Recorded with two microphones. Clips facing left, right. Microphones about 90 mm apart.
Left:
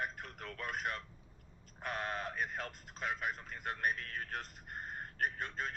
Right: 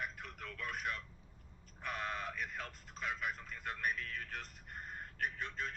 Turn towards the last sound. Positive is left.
turn(degrees=45)  # may be behind; listen again after turning